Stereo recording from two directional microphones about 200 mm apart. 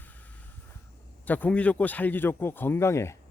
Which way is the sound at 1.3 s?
5° left (ahead or behind).